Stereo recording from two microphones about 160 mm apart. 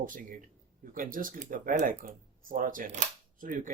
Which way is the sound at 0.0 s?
60° right (ahead or behind).